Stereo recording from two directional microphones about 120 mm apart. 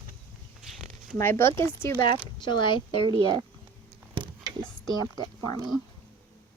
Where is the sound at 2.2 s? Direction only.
40° left (ahead or behind).